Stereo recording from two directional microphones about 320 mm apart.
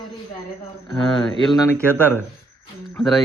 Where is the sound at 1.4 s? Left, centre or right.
Centre.